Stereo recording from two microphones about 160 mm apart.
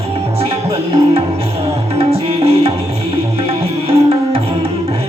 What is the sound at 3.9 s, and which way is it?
Tabla, 35° right (ahead or behind).